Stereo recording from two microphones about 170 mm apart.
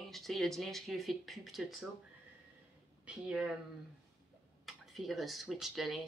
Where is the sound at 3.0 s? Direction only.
5° right (ahead or behind).